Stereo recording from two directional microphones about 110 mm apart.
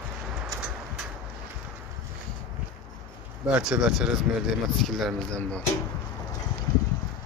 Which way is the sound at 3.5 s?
5° right (ahead or behind).